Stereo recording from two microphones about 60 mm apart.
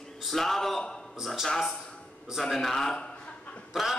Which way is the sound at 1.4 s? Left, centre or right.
Centre.